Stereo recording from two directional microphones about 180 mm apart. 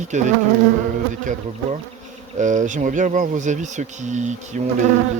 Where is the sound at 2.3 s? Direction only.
45° right (ahead or behind).